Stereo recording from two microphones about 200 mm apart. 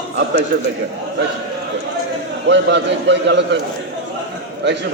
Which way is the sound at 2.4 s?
60° right (ahead or behind).